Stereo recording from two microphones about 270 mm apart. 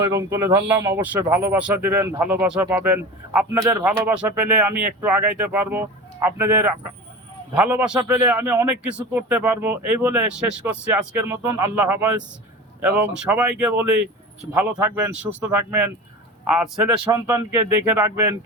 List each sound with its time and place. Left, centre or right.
0.0 s speech: centre
17.1 s speech: centre